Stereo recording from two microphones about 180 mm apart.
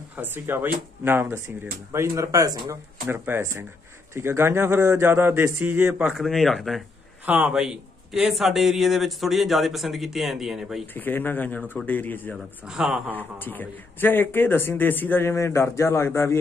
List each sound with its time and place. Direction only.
0.2 s a man's voice: 10° right (ahead or behind)
11.0 s speech: 10° left (ahead or behind)
12.6 s a man's voice: 5° right (ahead or behind)
13.1 s speech: 10° left (ahead or behind)